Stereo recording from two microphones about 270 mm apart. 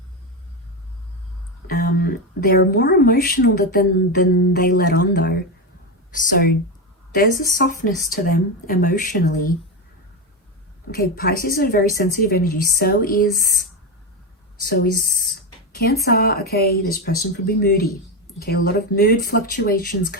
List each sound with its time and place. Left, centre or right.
1.6 s speech: left
10.9 s speech: left
14.6 s speech: left